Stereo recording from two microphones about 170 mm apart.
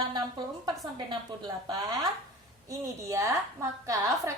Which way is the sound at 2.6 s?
20° right (ahead or behind).